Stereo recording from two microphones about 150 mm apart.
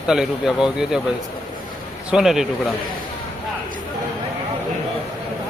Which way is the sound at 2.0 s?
5° right (ahead or behind).